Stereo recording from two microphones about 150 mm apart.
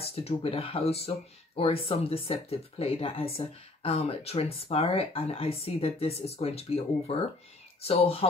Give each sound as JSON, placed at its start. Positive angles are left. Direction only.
{"t": 0.0, "sound": "speech", "side_deg": 40}